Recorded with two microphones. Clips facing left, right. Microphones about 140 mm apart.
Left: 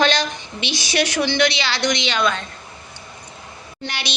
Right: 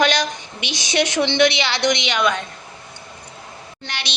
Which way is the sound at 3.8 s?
Centre (ahead or behind).